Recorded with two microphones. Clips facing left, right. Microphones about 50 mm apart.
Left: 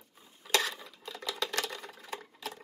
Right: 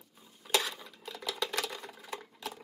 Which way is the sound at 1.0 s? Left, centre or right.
Centre.